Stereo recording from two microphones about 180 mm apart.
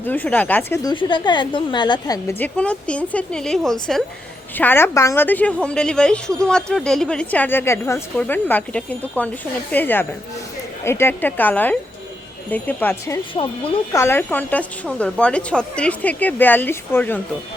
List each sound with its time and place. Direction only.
0.0 s speech: 10° left (ahead or behind)
2.4 s a woman's voice: 5° left (ahead or behind)
13.3 s speech: 30° left (ahead or behind)
13.9 s a woman's voice: 15° left (ahead or behind)